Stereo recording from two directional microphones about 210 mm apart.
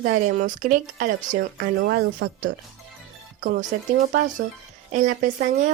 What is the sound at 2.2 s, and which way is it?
Speech, 55° right (ahead or behind).